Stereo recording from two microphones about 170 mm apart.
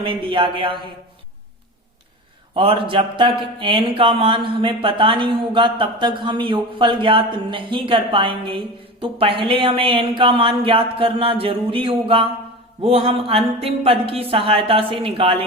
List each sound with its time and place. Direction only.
0.0 s speech: 30° right (ahead or behind)
2.6 s speech: 30° right (ahead or behind)